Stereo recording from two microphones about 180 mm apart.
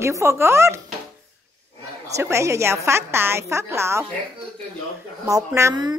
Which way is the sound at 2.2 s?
15° right (ahead or behind).